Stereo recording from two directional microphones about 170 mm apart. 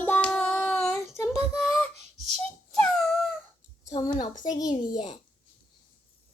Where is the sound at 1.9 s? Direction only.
40° right (ahead or behind).